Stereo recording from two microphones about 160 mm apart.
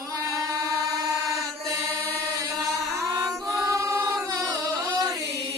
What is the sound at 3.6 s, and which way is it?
Choir, 20° right (ahead or behind).